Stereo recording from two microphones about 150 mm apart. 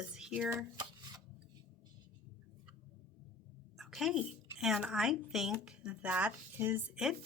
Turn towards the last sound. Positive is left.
turn(degrees=-15)  # may be behind; listen again after turning